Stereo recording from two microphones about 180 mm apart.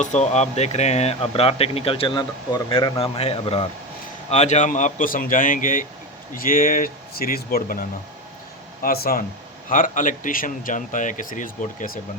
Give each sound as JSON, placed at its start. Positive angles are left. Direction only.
{"t": 0.0, "sound": "speech", "side_deg": 40}